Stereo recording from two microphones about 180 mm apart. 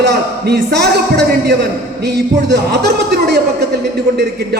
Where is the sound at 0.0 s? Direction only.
65° right (ahead or behind).